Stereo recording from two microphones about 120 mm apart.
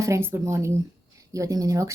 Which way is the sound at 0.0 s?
20° right (ahead or behind).